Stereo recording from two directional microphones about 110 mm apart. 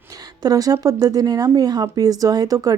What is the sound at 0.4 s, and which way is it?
Speech, 35° right (ahead or behind).